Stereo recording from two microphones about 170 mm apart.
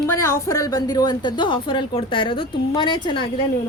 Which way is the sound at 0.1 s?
20° left (ahead or behind).